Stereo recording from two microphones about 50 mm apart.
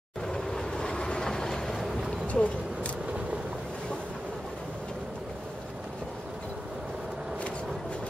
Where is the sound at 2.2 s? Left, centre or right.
Left.